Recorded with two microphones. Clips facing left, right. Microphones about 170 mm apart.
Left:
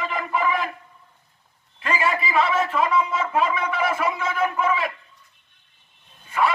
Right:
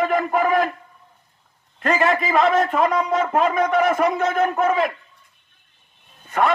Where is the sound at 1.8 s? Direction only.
50° right (ahead or behind).